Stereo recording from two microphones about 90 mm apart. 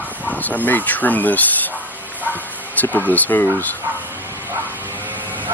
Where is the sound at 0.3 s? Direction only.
20° left (ahead or behind).